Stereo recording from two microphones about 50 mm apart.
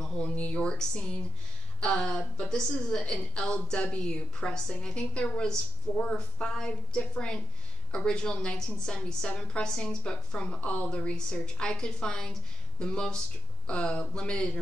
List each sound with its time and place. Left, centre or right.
0.0 s a woman's voice: centre